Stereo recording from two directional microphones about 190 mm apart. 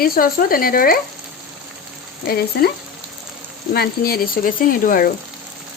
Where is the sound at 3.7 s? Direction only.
55° left (ahead or behind).